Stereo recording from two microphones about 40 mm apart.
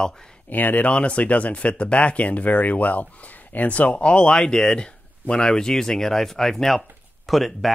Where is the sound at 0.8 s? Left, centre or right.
Left.